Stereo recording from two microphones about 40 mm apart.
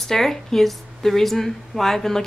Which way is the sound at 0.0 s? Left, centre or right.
Centre.